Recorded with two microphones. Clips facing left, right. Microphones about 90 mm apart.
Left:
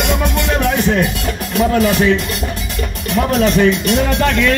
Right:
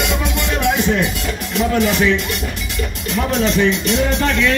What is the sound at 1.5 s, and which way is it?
Speech, 45° left (ahead or behind).